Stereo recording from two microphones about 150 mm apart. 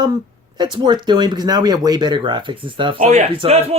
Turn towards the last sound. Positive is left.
turn(degrees=-45)  # may be behind; listen again after turning